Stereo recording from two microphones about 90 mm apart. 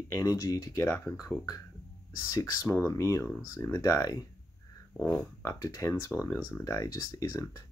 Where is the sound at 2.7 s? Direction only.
25° left (ahead or behind).